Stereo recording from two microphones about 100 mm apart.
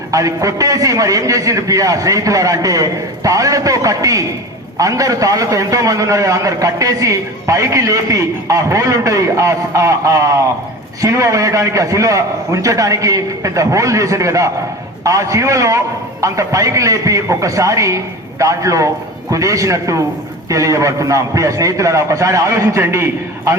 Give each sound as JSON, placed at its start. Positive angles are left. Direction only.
{"t": 0.1, "sound": "a man's voice", "side_deg": -35}